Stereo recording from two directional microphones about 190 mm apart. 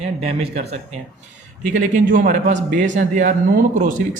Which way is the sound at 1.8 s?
45° right (ahead or behind).